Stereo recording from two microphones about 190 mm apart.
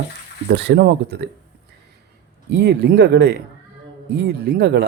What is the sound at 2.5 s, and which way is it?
Speech, 65° right (ahead or behind).